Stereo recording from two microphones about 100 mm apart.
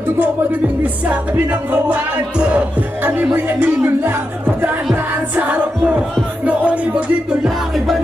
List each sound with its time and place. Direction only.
1.0 s music: 15° right (ahead or behind)
5.3 s music: 15° right (ahead or behind)
7.4 s music: centre (ahead or behind)